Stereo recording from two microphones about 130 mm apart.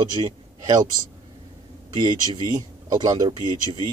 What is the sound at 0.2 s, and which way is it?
Speech, 40° right (ahead or behind).